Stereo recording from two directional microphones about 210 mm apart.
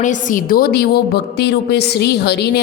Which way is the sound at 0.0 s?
40° left (ahead or behind).